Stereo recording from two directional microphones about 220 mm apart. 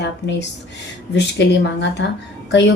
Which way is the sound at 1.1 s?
50° left (ahead or behind).